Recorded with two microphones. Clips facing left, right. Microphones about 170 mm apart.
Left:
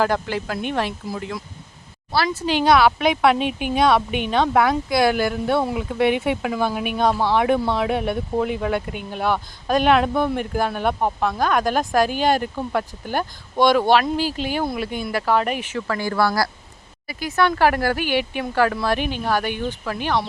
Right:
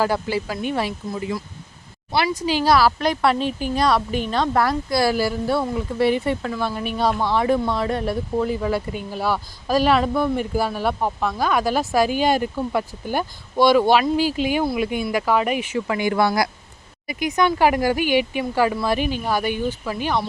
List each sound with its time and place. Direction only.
0.0 s speech: 5° right (ahead or behind)
2.1 s speech: 15° right (ahead or behind)
2.5 s speech: centre (ahead or behind); by 6.8 s 15° left (ahead or behind)
6.8 s speech: 5° left (ahead or behind)